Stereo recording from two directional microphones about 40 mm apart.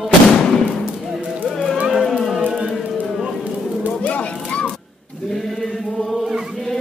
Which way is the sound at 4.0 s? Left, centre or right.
Left.